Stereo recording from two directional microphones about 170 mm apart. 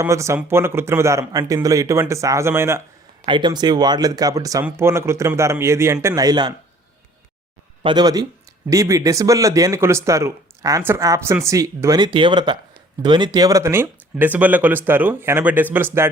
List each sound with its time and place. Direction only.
0.0 s speech: 15° right (ahead or behind)
3.2 s speech: 25° right (ahead or behind)
7.8 s speech: 25° right (ahead or behind); by 16.0 s 10° right (ahead or behind)